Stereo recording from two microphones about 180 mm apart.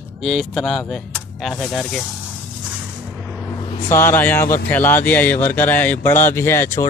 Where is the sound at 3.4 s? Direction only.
30° left (ahead or behind).